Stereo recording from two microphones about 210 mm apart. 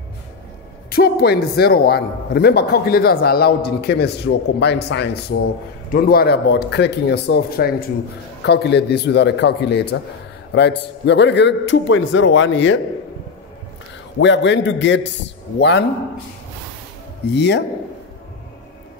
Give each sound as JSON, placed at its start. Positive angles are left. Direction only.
{"t": 0.8, "sound": "a man's voice", "side_deg": 45}
{"t": 14.2, "sound": "a man's voice", "side_deg": 60}
{"t": 17.3, "sound": "a man's voice", "side_deg": 55}